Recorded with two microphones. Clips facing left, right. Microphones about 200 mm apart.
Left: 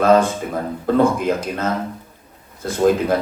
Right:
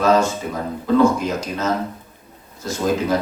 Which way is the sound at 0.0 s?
55° left (ahead or behind).